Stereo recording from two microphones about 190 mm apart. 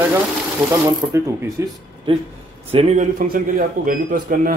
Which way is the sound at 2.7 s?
40° right (ahead or behind).